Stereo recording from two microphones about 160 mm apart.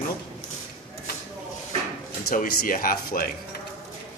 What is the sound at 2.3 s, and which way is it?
Speech, 60° left (ahead or behind).